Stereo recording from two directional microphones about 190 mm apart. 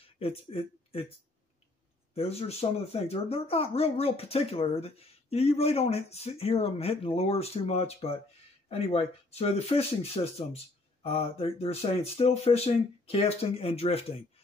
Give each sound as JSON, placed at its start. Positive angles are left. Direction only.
{"t": 0.0, "sound": "speech", "side_deg": 30}
{"t": 2.1, "sound": "speech", "side_deg": 35}